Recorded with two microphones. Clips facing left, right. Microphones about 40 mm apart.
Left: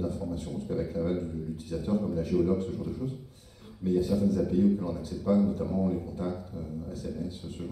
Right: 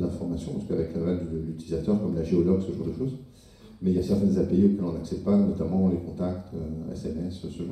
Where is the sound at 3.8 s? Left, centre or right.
Left.